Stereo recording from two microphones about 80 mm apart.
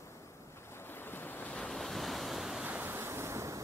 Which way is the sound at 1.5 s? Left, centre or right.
Centre.